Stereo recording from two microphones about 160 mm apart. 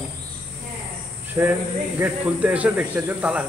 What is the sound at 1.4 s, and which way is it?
Speech, 20° right (ahead or behind).